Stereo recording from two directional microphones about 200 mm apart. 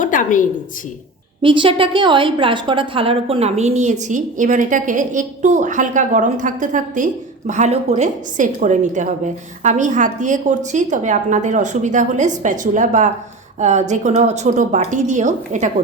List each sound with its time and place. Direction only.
0.0 s a woman's voice: 40° left (ahead or behind)
1.4 s a woman's voice: 25° right (ahead or behind)